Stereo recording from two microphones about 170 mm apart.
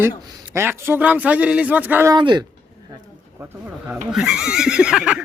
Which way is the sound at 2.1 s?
25° right (ahead or behind).